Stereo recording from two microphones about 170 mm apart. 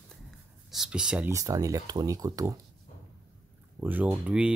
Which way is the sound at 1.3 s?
20° right (ahead or behind).